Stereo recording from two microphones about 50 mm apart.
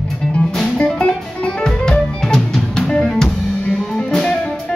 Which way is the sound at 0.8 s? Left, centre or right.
Centre.